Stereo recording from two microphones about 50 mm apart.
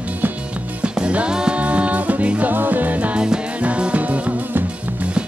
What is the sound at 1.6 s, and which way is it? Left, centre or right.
Music, right.